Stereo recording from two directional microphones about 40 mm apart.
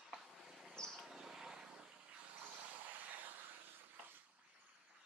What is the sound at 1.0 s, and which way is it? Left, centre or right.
Vehicle, centre.